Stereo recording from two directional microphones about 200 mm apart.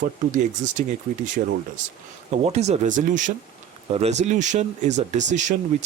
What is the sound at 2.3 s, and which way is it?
Speech, 35° right (ahead or behind).